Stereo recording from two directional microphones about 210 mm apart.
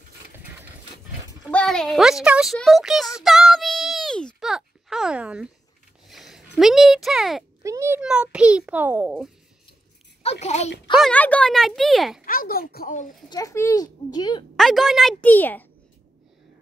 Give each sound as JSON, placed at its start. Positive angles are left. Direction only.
{"t": 1.5, "sound": "a sound", "side_deg": 5}
{"t": 6.0, "sound": "speech", "side_deg": 0}
{"t": 7.6, "sound": "a child's voice", "side_deg": -15}
{"t": 10.4, "sound": "speech", "side_deg": 30}
{"t": 11.0, "sound": "a child's voice", "side_deg": 5}
{"t": 12.3, "sound": "speech", "side_deg": 45}
{"t": 13.3, "sound": "speech", "side_deg": 15}
{"t": 14.6, "sound": "a child's voice", "side_deg": 0}